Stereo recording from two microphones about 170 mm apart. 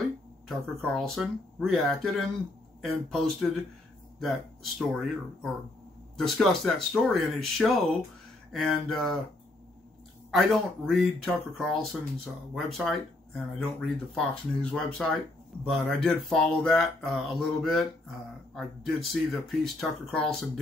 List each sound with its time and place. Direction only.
0.5 s speech: centre (ahead or behind)
10.3 s speech: centre (ahead or behind)